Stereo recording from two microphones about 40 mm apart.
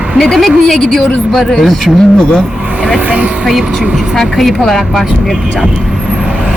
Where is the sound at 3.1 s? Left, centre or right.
Right.